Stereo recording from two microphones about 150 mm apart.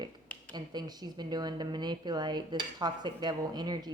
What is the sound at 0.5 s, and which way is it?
Speech, 30° right (ahead or behind).